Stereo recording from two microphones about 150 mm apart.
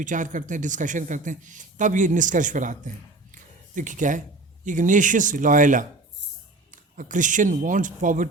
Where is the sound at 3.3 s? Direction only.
60° right (ahead or behind).